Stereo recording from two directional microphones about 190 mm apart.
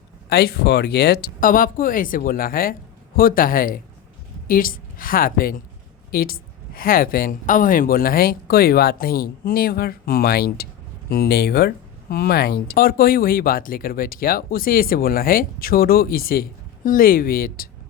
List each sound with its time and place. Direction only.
0.3 s a woman's voice: 55° left (ahead or behind)